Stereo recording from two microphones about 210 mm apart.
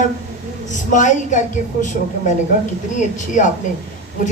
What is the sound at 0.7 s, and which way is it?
A woman's voice, 35° left (ahead or behind).